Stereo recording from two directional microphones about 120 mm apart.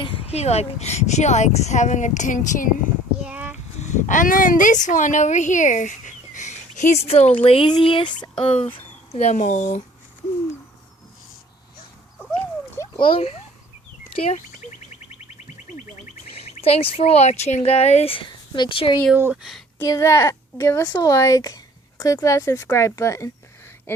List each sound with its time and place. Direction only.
0.0 s speech: 50° left (ahead or behind); by 2.5 s 90° left
3.2 s a sound: 10° right (ahead or behind)
3.8 s speech: 85° left
13.0 s speech: 45° left (ahead or behind)
16.3 s speech: 55° left (ahead or behind)
17.6 s speech: 55° left (ahead or behind)
19.1 s speech: 20° right (ahead or behind)
19.4 s speech: centre (ahead or behind)
19.8 s speech: 25° left (ahead or behind)